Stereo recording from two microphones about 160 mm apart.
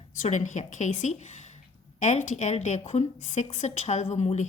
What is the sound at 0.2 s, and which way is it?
A woman's voice, 50° left (ahead or behind).